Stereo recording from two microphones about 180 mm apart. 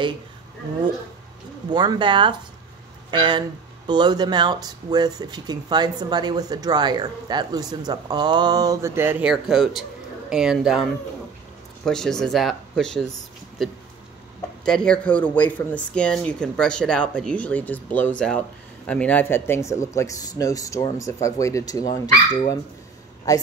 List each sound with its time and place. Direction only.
1.7 s a woman's voice: 25° right (ahead or behind); by 23.4 s 20° left (ahead or behind)